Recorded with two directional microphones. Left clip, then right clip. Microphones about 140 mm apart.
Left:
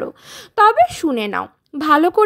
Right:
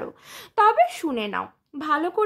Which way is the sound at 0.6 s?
30° left (ahead or behind).